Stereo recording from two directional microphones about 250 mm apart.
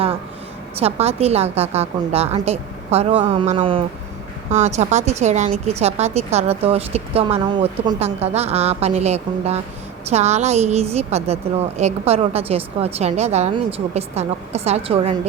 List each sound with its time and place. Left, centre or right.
0.8 s speech: right